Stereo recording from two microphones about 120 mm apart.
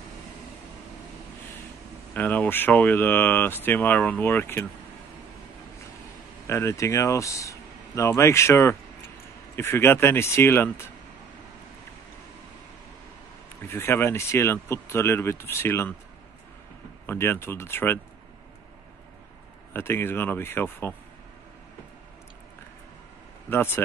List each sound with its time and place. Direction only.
2.1 s speech: 15° left (ahead or behind)
6.4 s speech: 25° left (ahead or behind)
13.7 s speech: 20° left (ahead or behind)
17.0 s speech: 20° left (ahead or behind)
19.7 s speech: 20° left (ahead or behind)
23.5 s speech: 20° left (ahead or behind)